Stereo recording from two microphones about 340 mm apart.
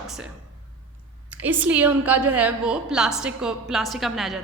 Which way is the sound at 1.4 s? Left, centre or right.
Centre.